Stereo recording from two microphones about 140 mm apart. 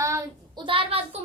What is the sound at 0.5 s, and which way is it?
Speech, 40° right (ahead or behind).